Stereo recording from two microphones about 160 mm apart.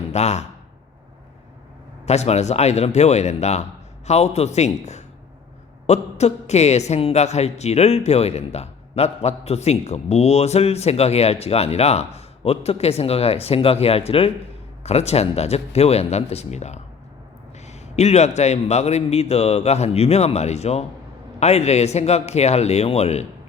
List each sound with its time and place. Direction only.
0.1 s speech: 45° left (ahead or behind)
2.0 s a man's voice: 45° left (ahead or behind)